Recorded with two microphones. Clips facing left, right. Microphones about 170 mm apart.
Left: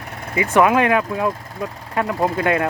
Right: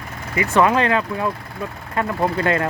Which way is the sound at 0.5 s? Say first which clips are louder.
Left 2 dB; 10° left (ahead or behind).